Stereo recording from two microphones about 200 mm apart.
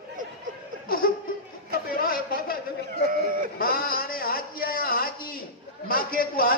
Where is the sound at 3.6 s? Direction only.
45° left (ahead or behind).